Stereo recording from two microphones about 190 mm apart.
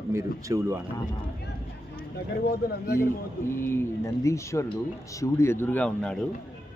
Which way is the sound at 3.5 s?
10° left (ahead or behind).